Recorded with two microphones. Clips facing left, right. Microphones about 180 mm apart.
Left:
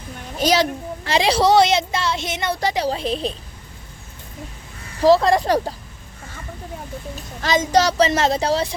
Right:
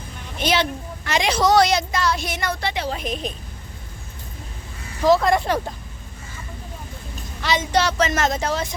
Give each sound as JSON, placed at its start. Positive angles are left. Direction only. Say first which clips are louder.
{"t": 0.3, "sound": "speech", "louder": "left 3 dB", "side_deg": 40}
{"t": 2.6, "sound": "a child's voice", "louder": "left 4 dB", "side_deg": 40}
{"t": 5.0, "sound": "a child's voice", "louder": "left 3 dB", "side_deg": 30}
{"t": 7.4, "sound": "a child's voice", "louder": "left 3 dB", "side_deg": 40}